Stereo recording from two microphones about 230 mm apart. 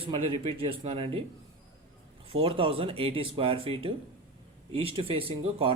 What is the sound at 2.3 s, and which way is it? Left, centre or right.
Speech, right.